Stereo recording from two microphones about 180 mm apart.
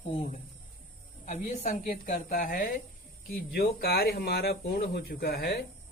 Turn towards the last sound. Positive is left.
turn(degrees=60)  # may be behind; listen again after turning